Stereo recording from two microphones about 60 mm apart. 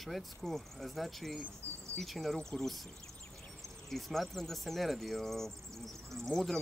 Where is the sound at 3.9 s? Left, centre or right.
Centre.